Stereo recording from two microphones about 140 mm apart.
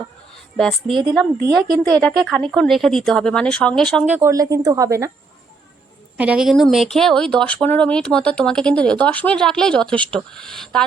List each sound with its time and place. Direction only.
0.5 s a woman's voice: 5° left (ahead or behind)
0.9 s speech: 35° right (ahead or behind)
1.9 s speech: 5° left (ahead or behind)
4.0 s speech: 10° right (ahead or behind)
4.3 s speech: 25° right (ahead or behind)
6.1 s speech: 10° right (ahead or behind)